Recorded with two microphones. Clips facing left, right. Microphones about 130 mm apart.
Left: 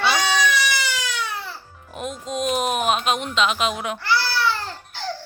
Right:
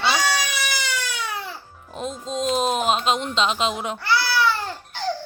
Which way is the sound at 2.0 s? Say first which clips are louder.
Even; 25° right (ahead or behind).